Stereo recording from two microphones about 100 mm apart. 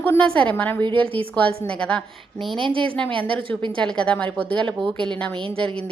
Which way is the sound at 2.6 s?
55° right (ahead or behind).